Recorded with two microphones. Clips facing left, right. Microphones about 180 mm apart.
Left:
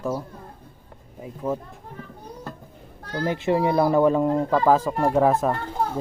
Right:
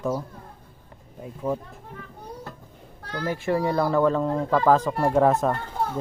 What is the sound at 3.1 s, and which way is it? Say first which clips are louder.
Speech: left 3 dB; 20° left (ahead or behind).